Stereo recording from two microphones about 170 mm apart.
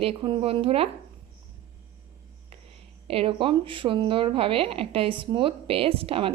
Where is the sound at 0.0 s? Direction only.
30° right (ahead or behind).